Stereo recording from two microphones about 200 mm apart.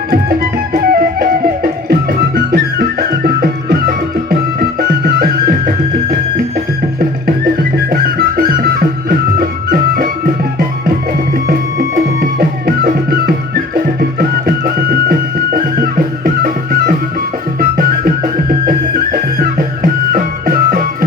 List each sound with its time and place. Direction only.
0.1 s music: 45° right (ahead or behind)
7.9 s music: 50° right (ahead or behind)
11.4 s music: 55° right (ahead or behind)